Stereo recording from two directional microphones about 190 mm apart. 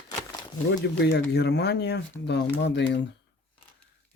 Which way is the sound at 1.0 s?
60° left (ahead or behind).